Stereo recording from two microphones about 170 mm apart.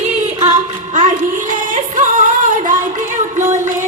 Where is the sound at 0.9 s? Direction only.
50° right (ahead or behind).